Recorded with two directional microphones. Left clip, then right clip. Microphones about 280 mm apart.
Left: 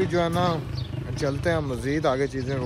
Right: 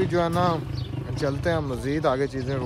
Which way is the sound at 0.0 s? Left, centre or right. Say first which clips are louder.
Right 1 dB; centre.